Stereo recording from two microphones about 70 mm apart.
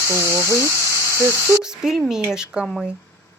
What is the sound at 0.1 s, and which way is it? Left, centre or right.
Speech, right.